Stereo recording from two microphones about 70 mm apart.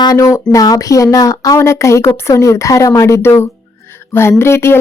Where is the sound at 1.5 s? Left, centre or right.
Left.